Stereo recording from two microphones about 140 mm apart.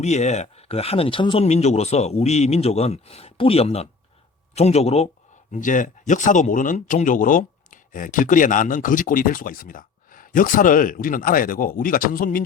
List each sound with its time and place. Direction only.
0.0 s a man's voice: 55° left (ahead or behind); by 1.5 s 40° left (ahead or behind)
1.5 s a man's voice: 50° left (ahead or behind)
5.5 s speech: 65° left (ahead or behind); by 12.4 s 85° left